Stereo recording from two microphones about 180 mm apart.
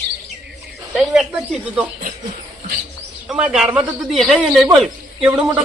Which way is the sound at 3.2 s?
5° right (ahead or behind).